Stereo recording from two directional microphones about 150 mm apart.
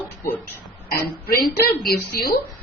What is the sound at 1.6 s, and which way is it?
Speech, 90° left.